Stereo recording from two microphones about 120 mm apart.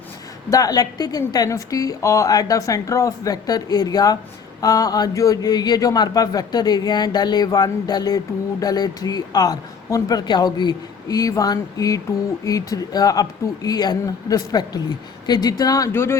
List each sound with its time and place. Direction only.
0.5 s a woman's voice: 30° left (ahead or behind)